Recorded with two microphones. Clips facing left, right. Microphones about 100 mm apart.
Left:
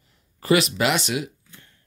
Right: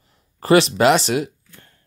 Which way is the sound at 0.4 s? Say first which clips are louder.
Right 6 dB; 35° right (ahead or behind).